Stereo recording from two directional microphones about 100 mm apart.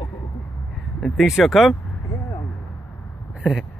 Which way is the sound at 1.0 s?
Centre (ahead or behind).